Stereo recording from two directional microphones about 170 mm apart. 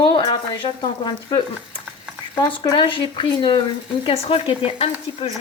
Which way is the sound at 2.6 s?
30° left (ahead or behind).